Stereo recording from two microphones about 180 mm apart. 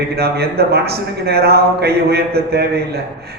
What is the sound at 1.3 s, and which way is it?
A man's voice, 60° right (ahead or behind).